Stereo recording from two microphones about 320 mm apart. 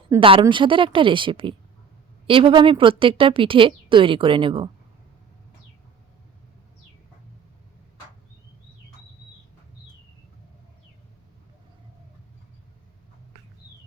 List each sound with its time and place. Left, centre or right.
0.1 s a woman's voice: centre